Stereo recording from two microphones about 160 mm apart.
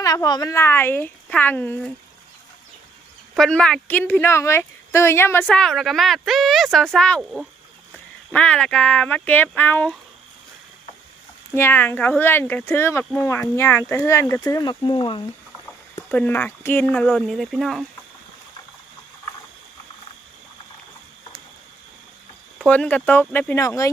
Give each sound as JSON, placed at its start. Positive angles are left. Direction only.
{"t": 0.0, "sound": "speech", "side_deg": 20}
{"t": 3.3, "sound": "speech", "side_deg": 5}
{"t": 7.9, "sound": "speech", "side_deg": 5}
{"t": 11.5, "sound": "speech", "side_deg": 15}
{"t": 16.0, "sound": "speech", "side_deg": 10}
{"t": 22.5, "sound": "speech", "side_deg": 5}